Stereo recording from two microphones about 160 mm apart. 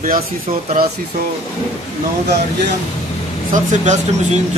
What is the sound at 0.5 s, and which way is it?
Speech, 50° right (ahead or behind).